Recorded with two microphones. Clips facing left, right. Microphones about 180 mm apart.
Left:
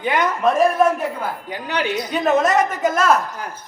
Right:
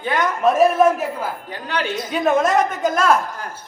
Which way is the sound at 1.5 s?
15° left (ahead or behind).